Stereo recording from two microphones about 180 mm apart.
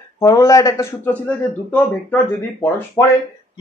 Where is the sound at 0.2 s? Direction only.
20° left (ahead or behind).